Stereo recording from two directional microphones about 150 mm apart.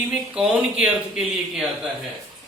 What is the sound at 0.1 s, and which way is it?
Speech, 5° right (ahead or behind).